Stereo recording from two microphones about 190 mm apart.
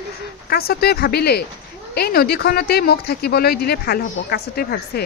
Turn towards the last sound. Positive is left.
turn(degrees=55)  # may be behind; listen again after turning